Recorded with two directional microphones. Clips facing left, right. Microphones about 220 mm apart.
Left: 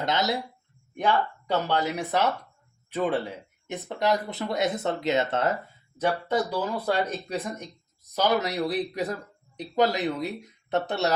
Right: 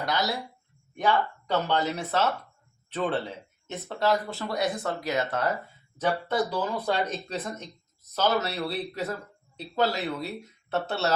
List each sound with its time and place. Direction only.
0.0 s speech: 20° left (ahead or behind)
6.5 s speech: 10° left (ahead or behind)